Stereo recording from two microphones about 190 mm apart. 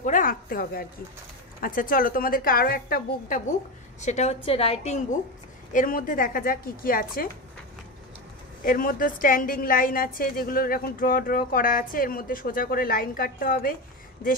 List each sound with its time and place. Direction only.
0.0 s a woman's voice: 45° left (ahead or behind)
4.0 s a woman's voice: 35° left (ahead or behind)
5.7 s a woman's voice: 45° left (ahead or behind)
8.6 s a woman's voice: 45° left (ahead or behind)